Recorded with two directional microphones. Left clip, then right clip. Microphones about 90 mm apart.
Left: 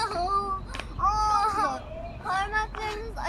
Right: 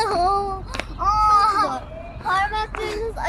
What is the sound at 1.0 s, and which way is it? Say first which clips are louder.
Baby cry: right 7 dB; centre (ahead or behind).